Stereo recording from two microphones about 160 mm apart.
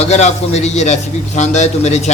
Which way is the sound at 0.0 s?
45° left (ahead or behind).